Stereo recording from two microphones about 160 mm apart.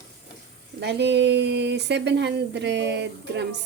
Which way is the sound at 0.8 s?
90° right.